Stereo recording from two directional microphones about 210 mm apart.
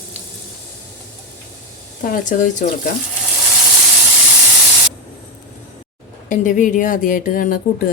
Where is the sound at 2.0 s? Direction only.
40° left (ahead or behind).